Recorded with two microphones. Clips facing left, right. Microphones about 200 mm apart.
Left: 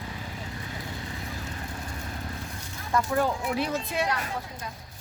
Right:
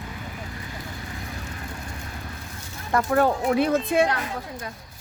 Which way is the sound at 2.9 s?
60° right (ahead or behind).